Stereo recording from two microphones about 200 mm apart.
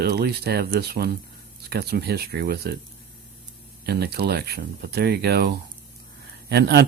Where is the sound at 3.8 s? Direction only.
55° right (ahead or behind).